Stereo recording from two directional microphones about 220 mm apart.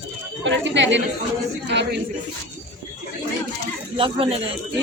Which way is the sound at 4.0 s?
25° right (ahead or behind).